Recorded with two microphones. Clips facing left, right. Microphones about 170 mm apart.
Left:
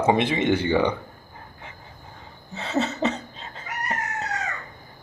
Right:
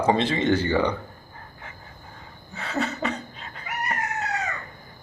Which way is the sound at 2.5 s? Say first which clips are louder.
Left 3 dB; 20° left (ahead or behind).